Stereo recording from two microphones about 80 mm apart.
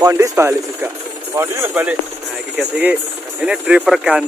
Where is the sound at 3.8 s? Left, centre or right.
Centre.